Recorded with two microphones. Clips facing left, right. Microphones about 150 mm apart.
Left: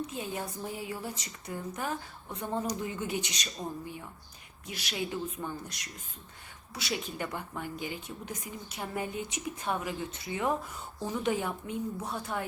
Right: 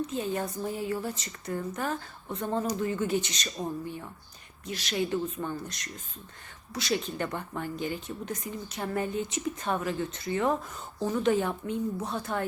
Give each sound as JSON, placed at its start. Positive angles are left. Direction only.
{"t": 0.1, "sound": "speech", "side_deg": 10}
{"t": 4.6, "sound": "speech", "side_deg": 10}